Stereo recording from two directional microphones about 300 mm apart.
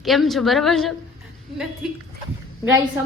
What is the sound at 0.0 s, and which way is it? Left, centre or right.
Speech, centre.